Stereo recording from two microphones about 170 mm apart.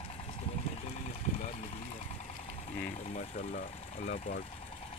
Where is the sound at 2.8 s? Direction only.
45° left (ahead or behind).